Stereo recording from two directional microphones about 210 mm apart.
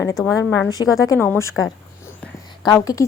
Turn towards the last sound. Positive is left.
turn(degrees=15)  # may be behind; listen again after turning